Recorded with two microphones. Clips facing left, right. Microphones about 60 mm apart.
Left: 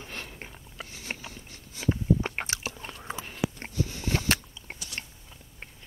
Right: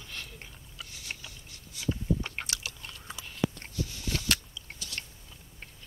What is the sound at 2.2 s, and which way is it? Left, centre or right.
Biting, left.